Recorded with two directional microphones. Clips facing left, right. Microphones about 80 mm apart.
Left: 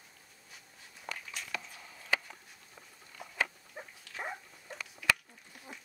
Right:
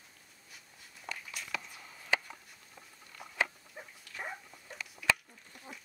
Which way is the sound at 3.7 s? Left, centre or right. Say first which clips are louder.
Left 2 dB; centre.